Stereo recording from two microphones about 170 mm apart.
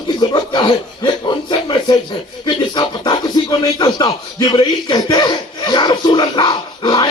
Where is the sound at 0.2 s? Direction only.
25° left (ahead or behind).